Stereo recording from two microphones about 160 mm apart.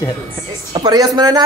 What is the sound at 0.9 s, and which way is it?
Speech, 25° right (ahead or behind).